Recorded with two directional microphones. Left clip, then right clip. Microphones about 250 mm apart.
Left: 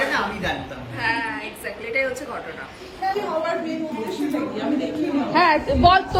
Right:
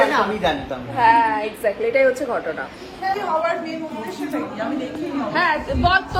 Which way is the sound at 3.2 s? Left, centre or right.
Centre.